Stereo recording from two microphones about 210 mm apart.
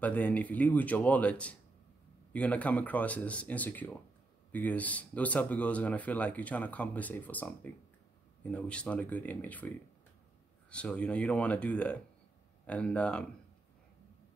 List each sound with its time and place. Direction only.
0.0 s speech: 5° left (ahead or behind)
10.7 s speech: 5° left (ahead or behind)